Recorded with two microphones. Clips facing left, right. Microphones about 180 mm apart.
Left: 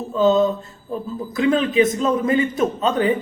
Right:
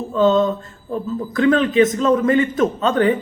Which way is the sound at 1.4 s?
10° left (ahead or behind).